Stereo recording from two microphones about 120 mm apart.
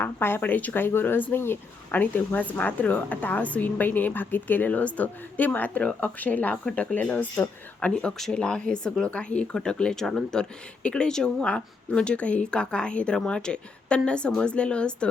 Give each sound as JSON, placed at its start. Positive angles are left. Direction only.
{"t": 0.0, "sound": "a woman's voice", "side_deg": 20}